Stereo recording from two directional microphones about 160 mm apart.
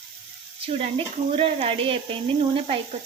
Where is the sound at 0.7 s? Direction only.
35° right (ahead or behind).